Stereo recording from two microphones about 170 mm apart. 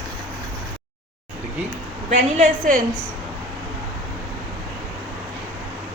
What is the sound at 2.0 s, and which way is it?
Speech, 50° right (ahead or behind).